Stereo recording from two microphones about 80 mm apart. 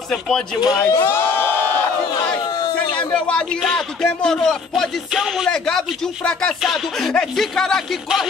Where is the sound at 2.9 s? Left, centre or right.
Centre.